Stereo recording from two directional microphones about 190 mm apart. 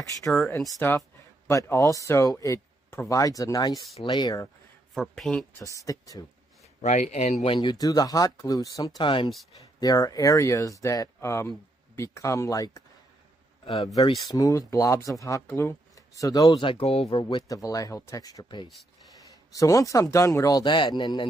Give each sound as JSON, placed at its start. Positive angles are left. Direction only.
{"t": 0.3, "sound": "speech", "side_deg": 5}
{"t": 4.9, "sound": "speech", "side_deg": 0}
{"t": 5.6, "sound": "speech", "side_deg": 15}
{"t": 6.8, "sound": "speech", "side_deg": 40}
{"t": 7.4, "sound": "speech", "side_deg": 25}
{"t": 14.2, "sound": "speech", "side_deg": 15}